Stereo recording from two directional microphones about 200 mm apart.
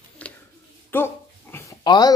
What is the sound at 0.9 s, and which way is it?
Speech, 10° left (ahead or behind).